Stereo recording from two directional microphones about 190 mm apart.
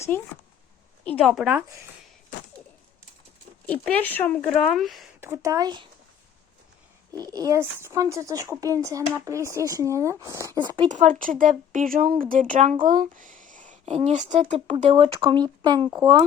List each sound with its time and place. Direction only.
1.0 s speech: 5° left (ahead or behind); by 1.9 s 15° right (ahead or behind)
3.8 s speech: 10° left (ahead or behind)
5.2 s speech: 15° right (ahead or behind)
7.1 s speech: 20° right (ahead or behind)
10.8 s speech: 40° right (ahead or behind); by 16.1 s 20° right (ahead or behind)